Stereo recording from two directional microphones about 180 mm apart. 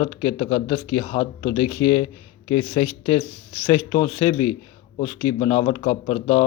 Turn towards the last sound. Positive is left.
turn(degrees=25)  # may be behind; listen again after turning